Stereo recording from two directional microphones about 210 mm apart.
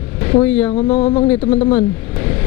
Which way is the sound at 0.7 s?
30° left (ahead or behind).